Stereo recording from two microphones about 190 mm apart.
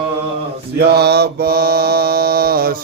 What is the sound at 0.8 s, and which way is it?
Mantra, 55° right (ahead or behind).